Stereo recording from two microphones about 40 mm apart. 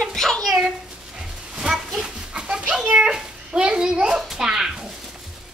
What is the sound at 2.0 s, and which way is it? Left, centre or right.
Children playing, right.